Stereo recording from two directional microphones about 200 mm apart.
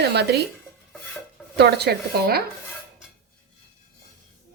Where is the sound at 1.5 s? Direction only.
55° right (ahead or behind).